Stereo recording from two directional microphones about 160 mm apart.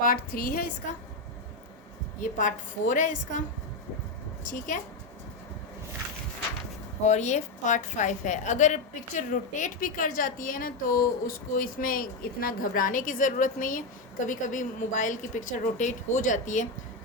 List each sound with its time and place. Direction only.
0.0 s a woman's voice: 65° left (ahead or behind)
2.2 s a woman's voice: 55° left (ahead or behind)
4.4 s a woman's voice: 50° left (ahead or behind)
7.0 s a woman's voice: 45° left (ahead or behind)